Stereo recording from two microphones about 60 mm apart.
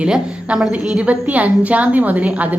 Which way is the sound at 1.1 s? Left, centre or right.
Right.